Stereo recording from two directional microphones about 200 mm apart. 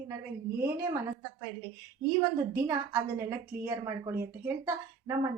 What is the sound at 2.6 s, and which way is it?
A woman's voice, 15° right (ahead or behind).